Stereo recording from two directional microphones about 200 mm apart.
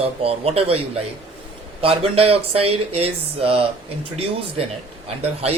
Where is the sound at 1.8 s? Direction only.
30° right (ahead or behind).